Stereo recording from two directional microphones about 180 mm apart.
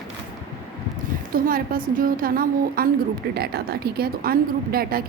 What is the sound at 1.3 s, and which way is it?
A woman's voice, 55° right (ahead or behind).